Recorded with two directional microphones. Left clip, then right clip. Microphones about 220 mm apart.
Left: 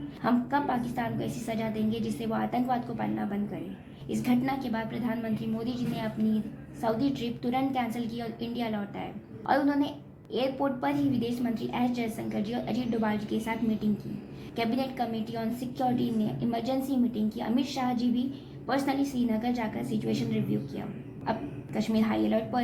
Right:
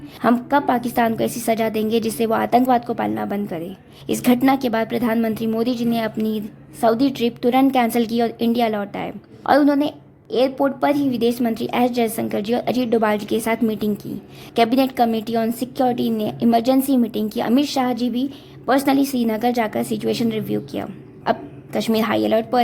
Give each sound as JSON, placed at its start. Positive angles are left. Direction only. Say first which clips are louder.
{"t": 0.2, "sound": "a woman's voice", "louder": "right 10 dB", "side_deg": -50}